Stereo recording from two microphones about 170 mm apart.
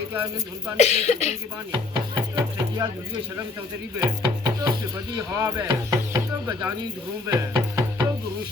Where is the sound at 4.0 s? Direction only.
25° right (ahead or behind).